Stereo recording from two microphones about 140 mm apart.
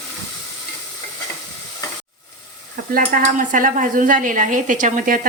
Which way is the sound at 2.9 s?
85° right.